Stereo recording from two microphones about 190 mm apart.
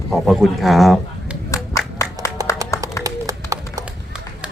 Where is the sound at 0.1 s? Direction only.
Centre (ahead or behind).